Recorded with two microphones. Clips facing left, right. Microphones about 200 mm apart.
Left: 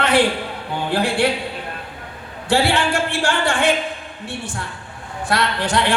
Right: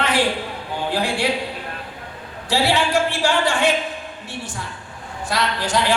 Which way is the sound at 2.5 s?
50° left (ahead or behind).